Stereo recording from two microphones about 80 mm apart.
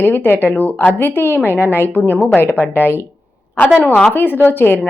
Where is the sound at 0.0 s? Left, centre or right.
Left.